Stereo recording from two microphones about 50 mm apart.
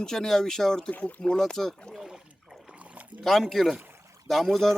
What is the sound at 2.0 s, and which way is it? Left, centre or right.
Toilet flush, centre.